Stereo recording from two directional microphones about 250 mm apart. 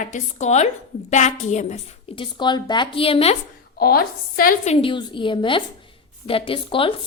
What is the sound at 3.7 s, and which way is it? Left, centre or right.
Speech, left.